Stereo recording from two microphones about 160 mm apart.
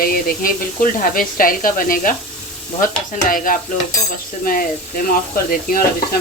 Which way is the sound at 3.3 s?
60° left (ahead or behind).